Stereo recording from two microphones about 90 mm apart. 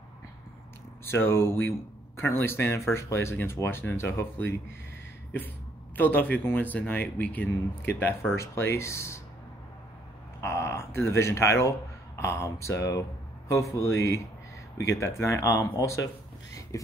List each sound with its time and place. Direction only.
1.0 s speech: 25° left (ahead or behind)
5.9 s speech: 20° left (ahead or behind)
10.4 s speech: 30° left (ahead or behind)
16.7 s a sound: 35° left (ahead or behind)